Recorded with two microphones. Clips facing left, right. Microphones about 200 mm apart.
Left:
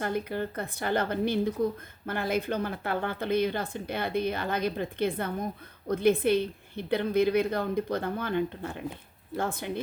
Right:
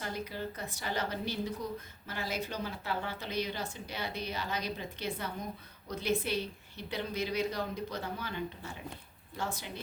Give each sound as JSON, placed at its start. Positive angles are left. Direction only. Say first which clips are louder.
{"t": 0.0, "sound": "speech", "louder": "left 8 dB", "side_deg": 55}